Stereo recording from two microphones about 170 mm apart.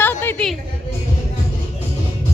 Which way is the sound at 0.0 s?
10° left (ahead or behind).